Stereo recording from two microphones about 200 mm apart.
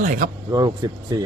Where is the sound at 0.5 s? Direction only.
15° right (ahead or behind).